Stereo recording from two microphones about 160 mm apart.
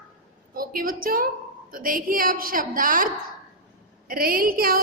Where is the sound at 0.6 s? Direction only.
65° right (ahead or behind).